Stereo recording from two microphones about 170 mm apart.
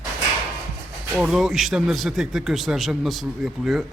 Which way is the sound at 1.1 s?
5° right (ahead or behind).